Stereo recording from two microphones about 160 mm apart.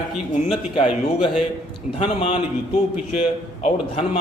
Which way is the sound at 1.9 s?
40° left (ahead or behind).